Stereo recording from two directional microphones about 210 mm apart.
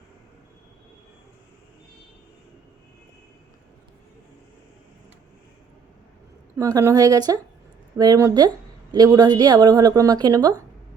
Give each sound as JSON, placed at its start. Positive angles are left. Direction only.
{"t": 6.6, "sound": "a woman's voice", "side_deg": -15}